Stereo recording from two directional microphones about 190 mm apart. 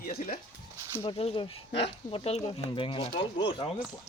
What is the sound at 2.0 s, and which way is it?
Speech, 30° left (ahead or behind).